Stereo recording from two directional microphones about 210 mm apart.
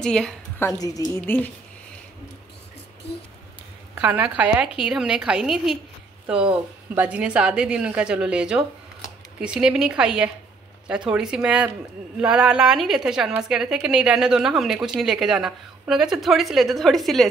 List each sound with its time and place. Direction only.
0.0 s a woman's voice: 5° left (ahead or behind)
0.7 s a woman's voice: 15° left (ahead or behind)
3.9 s a woman's voice: 5° right (ahead or behind)